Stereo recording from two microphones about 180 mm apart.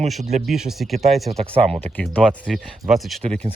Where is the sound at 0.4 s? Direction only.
Centre (ahead or behind).